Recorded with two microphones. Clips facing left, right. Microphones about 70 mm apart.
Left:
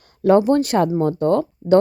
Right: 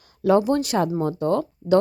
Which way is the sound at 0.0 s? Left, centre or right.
Left.